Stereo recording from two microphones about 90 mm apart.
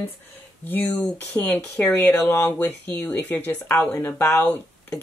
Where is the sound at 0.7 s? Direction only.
20° left (ahead or behind).